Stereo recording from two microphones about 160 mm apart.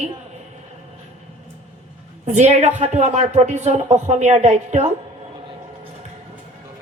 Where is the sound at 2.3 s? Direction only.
45° right (ahead or behind).